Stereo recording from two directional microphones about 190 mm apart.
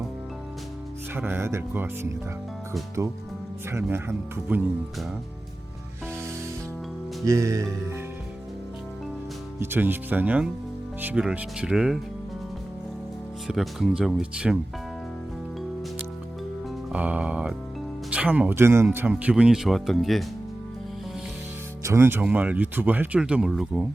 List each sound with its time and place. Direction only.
1.1 s speech: 10° right (ahead or behind)
7.3 s speech: 15° right (ahead or behind)
9.6 s speech: 10° right (ahead or behind)
13.5 s speech: centre (ahead or behind)
16.9 s speech: 5° right (ahead or behind)
21.8 s speech: 15° right (ahead or behind)